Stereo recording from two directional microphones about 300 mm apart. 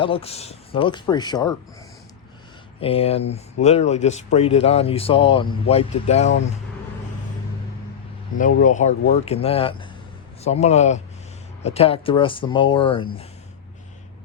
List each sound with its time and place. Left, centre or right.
0.0 s speech: centre
2.8 s speech: centre
8.4 s speech: left